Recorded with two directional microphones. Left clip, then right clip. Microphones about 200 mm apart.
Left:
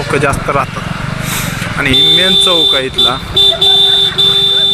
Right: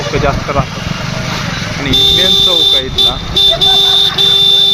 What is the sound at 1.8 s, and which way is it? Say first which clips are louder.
Speech: left 1 dB; centre (ahead or behind).